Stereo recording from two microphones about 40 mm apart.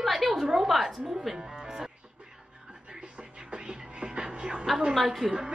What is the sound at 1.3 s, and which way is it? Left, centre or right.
Music, centre.